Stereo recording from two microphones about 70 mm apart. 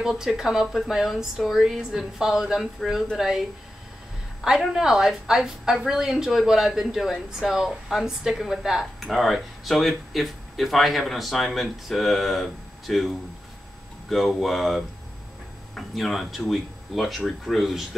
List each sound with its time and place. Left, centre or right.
0.2 s a woman's voice: centre